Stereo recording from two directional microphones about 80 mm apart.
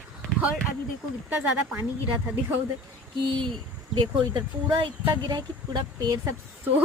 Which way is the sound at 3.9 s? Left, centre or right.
Right.